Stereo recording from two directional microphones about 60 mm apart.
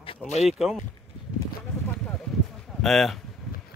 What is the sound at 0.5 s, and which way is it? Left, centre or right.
Speech, centre.